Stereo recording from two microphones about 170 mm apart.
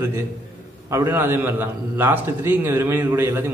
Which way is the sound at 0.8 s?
15° right (ahead or behind).